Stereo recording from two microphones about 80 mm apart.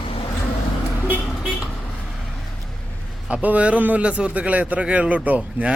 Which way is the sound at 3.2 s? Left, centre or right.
Centre.